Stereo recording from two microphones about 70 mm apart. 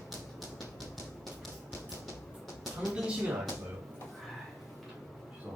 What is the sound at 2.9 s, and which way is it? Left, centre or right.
Speech, centre.